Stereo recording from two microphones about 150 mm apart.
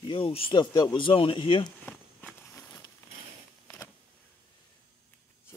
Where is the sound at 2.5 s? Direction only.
25° left (ahead or behind).